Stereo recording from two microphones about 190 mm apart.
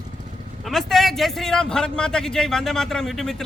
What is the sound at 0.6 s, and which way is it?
A man's voice, centre (ahead or behind).